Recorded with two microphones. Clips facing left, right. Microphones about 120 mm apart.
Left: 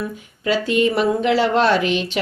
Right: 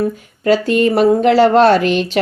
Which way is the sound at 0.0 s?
45° right (ahead or behind).